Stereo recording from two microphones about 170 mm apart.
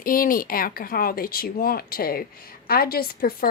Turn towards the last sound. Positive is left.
turn(degrees=60)  # may be behind; listen again after turning